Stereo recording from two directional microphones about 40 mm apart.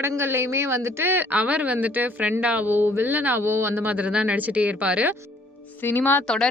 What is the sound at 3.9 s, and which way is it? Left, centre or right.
A woman's voice, right.